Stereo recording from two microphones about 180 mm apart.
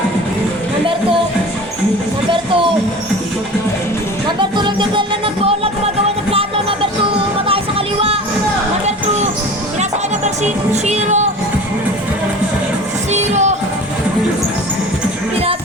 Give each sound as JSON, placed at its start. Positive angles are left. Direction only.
{"t": 4.4, "sound": "music", "side_deg": -25}
{"t": 10.2, "sound": "music", "side_deg": -40}
{"t": 13.1, "sound": "music", "side_deg": -40}